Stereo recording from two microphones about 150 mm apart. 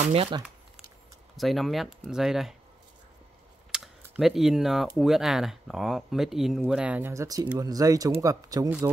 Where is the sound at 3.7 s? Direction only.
Centre (ahead or behind).